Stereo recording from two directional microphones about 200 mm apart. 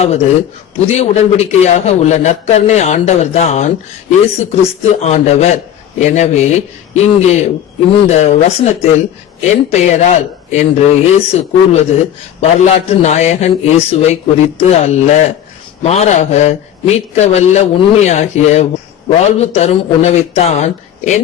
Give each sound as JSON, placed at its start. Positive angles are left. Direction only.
{"t": 0.0, "sound": "a man's voice", "side_deg": 30}